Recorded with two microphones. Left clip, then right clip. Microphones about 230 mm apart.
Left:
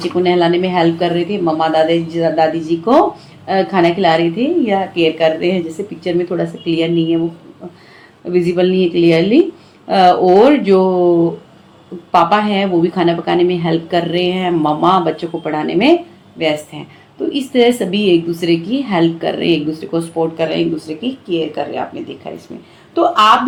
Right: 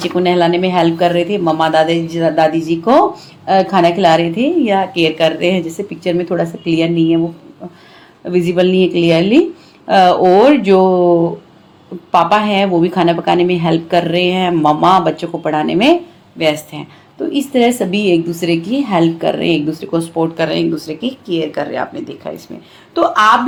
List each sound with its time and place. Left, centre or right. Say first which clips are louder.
0.0 s a woman's voice: right 1 dB; right
8.3 s a woman's voice: right 1 dB; right
12.1 s a woman's voice: right 1 dB; right